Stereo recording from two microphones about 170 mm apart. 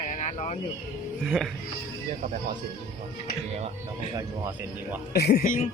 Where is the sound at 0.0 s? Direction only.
50° left (ahead or behind).